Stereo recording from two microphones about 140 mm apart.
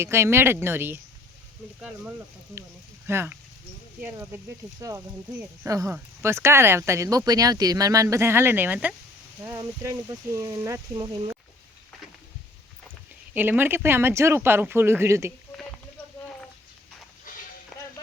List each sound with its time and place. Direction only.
0.0 s speech: 20° right (ahead or behind)
3.1 s speech: 15° right (ahead or behind)
13.3 s speech: 15° right (ahead or behind)
17.3 s a sound: 75° left (ahead or behind)